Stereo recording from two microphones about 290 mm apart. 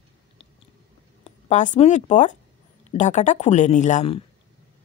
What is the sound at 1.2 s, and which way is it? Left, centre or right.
A woman's voice, left.